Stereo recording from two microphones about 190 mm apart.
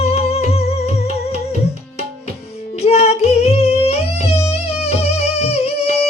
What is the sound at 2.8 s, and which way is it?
Music, 30° left (ahead or behind).